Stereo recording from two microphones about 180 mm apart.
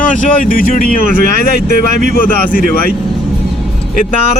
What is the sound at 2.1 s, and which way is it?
Speech, 55° left (ahead or behind).